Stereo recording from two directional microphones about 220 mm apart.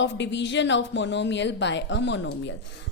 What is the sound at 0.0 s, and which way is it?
A woman's voice, 55° left (ahead or behind).